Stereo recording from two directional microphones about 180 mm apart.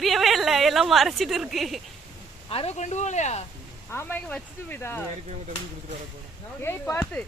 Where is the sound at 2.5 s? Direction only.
35° left (ahead or behind).